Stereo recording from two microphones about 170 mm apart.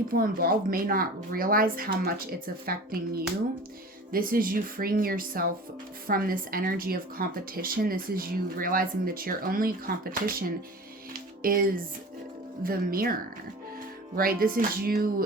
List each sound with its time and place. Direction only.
0.1 s speech: 55° right (ahead or behind)
11.4 s speech: 55° right (ahead or behind)
14.2 s speech: 60° right (ahead or behind)